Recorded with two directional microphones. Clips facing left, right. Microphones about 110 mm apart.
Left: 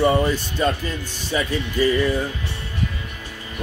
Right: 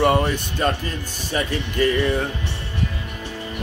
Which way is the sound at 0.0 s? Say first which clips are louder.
Even; 60° right (ahead or behind).